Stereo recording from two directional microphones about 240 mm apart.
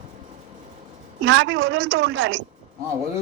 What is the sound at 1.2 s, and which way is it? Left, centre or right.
A woman's voice, right.